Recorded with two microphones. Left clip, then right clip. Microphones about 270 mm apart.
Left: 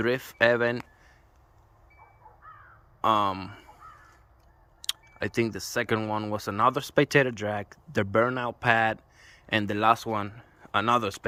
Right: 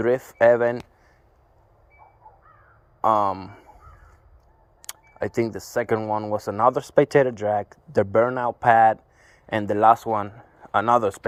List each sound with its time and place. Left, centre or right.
0.0 s speech: centre
3.0 s speech: centre
3.6 s crow: centre
5.1 s speech: centre